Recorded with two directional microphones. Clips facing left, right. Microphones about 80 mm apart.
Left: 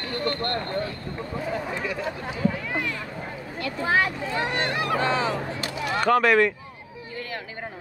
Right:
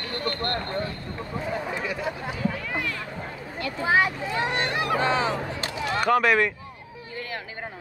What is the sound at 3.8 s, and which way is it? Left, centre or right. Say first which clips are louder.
Speech: right 1 dB; centre.